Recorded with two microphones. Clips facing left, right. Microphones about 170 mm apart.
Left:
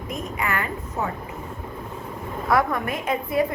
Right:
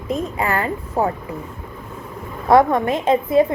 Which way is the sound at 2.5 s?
25° right (ahead or behind).